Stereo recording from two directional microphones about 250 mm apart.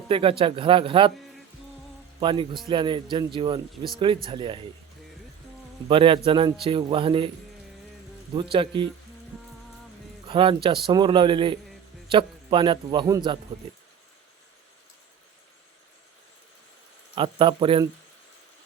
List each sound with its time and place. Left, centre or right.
0.1 s a man's voice: right
2.2 s a man's voice: centre
5.9 s a man's voice: right
8.4 s a man's voice: centre
10.2 s a man's voice: centre
17.2 s a man's voice: centre